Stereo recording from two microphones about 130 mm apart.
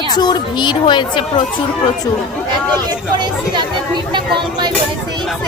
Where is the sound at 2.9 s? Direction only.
35° right (ahead or behind).